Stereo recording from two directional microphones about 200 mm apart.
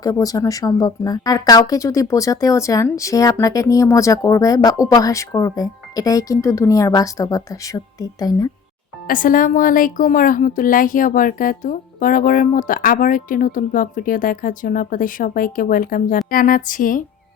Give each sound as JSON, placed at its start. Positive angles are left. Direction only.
{"t": 0.0, "sound": "speech", "side_deg": 15}
{"t": 9.0, "sound": "a woman's voice", "side_deg": 45}